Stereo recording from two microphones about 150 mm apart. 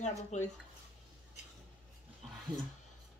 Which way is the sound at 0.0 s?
50° left (ahead or behind).